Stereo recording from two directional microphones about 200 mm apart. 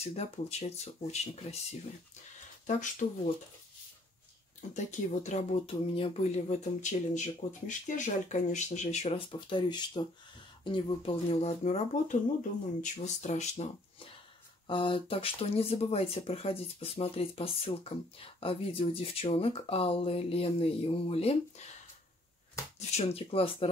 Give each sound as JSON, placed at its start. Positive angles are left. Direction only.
{"t": 0.0, "sound": "speech", "side_deg": 30}
{"t": 2.6, "sound": "speech", "side_deg": 35}
{"t": 4.6, "sound": "speech", "side_deg": 40}
{"t": 22.8, "sound": "speech", "side_deg": 35}